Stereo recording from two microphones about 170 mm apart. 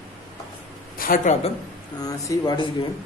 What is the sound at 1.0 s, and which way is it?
Speech, 55° left (ahead or behind).